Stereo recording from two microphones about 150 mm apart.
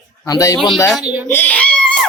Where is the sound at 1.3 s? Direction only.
10° left (ahead or behind).